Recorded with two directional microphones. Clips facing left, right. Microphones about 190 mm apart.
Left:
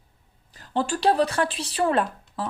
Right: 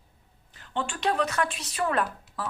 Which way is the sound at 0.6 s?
35° left (ahead or behind).